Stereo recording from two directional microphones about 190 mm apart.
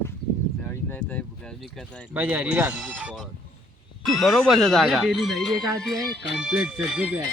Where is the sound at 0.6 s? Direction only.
10° left (ahead or behind).